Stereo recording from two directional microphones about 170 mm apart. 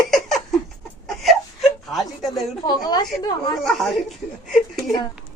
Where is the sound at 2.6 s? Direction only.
25° left (ahead or behind).